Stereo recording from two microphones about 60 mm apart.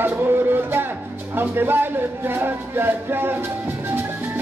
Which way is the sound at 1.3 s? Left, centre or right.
Right.